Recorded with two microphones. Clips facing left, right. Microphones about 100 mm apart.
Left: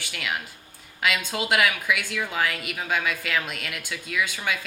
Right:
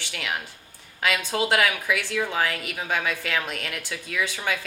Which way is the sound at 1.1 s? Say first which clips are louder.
Right 3 dB; 35° right (ahead or behind).